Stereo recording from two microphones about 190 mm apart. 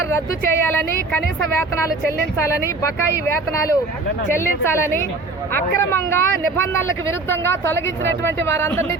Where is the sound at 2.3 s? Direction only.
15° left (ahead or behind).